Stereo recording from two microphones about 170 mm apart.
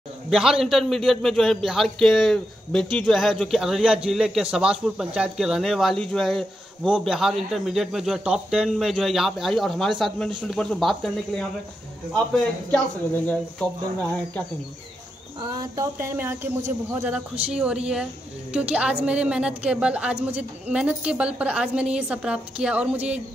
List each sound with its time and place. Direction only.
0.3 s a man's voice: 5° right (ahead or behind)
12.7 s speech: 5° left (ahead or behind)
15.6 s a woman's voice: 20° right (ahead or behind)